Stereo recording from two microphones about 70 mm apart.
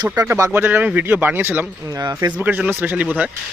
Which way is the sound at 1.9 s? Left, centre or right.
Right.